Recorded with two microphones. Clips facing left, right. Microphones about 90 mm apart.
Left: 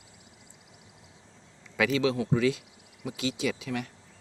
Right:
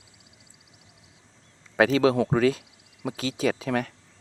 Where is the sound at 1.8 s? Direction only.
40° right (ahead or behind).